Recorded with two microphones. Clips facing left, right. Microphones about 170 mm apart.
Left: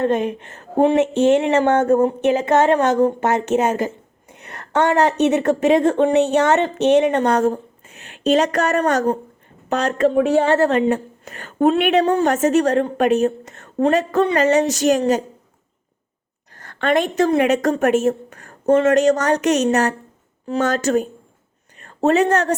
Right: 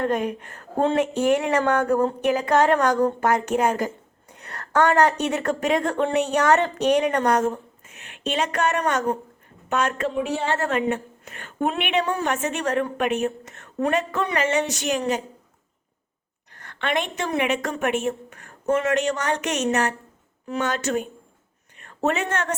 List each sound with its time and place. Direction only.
0.0 s a woman's voice: 25° left (ahead or behind); by 15.2 s 40° left (ahead or behind)
16.5 s a woman's voice: 35° left (ahead or behind)